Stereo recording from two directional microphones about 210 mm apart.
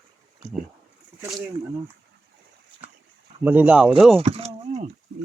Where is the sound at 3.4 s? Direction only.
5° right (ahead or behind).